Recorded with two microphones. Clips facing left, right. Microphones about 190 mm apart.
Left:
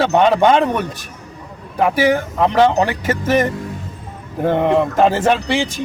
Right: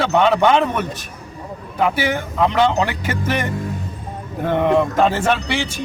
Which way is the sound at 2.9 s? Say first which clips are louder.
Left 4 dB; 45° left (ahead or behind).